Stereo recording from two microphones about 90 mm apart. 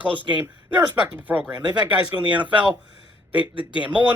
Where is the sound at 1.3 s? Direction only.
20° right (ahead or behind).